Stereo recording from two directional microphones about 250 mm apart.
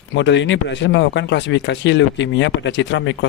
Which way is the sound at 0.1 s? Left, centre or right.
Left.